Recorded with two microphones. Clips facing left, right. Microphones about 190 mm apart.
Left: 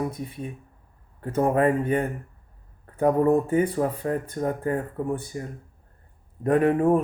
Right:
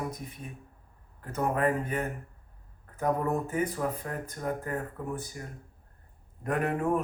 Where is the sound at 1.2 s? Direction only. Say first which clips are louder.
Left 7 dB; 30° left (ahead or behind).